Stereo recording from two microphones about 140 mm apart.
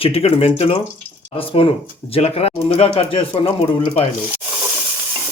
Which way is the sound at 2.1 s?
45° left (ahead or behind).